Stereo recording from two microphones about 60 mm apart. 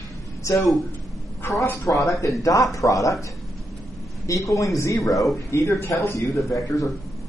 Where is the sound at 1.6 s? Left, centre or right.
Left.